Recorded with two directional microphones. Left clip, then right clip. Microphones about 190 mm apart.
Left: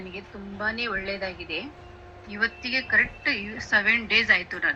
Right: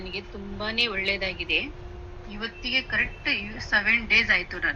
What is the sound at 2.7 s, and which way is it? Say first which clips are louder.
A woman's voice: left 1 dB; 5° right (ahead or behind).